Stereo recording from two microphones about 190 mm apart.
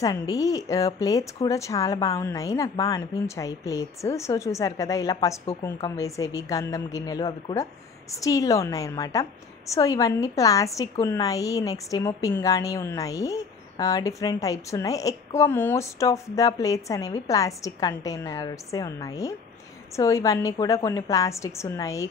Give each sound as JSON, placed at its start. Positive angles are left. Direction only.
{"t": 0.0, "sound": "a woman's voice", "side_deg": 20}